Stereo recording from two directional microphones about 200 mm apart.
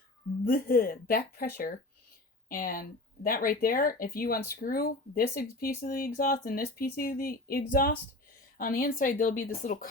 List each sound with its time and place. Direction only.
0.4 s speech: 45° left (ahead or behind)
2.5 s speech: 45° left (ahead or behind)